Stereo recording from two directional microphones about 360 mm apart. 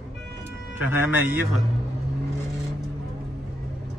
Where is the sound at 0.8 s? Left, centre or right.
Centre.